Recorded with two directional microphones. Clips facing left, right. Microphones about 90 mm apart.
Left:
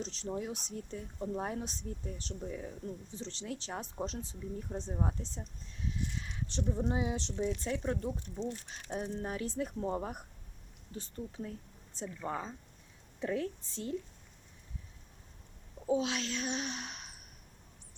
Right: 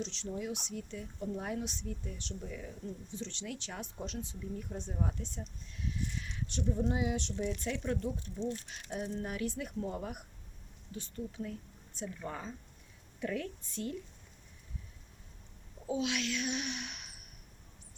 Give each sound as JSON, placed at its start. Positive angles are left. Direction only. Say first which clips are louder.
{"t": 0.0, "sound": "a woman's voice", "louder": "left 1 dB", "side_deg": 40}
{"t": 15.9, "sound": "a child's voice", "louder": "left 2 dB", "side_deg": 35}